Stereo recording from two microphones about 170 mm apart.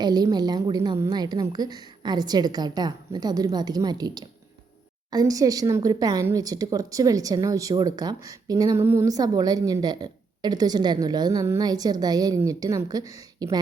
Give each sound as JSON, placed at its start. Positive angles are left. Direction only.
{"t": 0.0, "sound": "speech", "side_deg": -25}